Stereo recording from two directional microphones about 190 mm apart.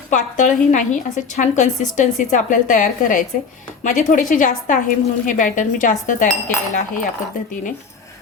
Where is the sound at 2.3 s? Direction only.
40° left (ahead or behind).